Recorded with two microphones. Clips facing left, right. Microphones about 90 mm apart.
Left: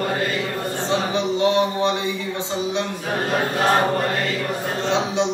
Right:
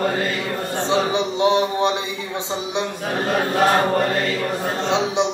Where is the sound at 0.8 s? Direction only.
20° right (ahead or behind).